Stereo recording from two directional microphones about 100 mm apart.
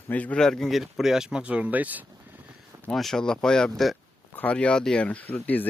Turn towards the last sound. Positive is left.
turn(degrees=15)  # may be behind; listen again after turning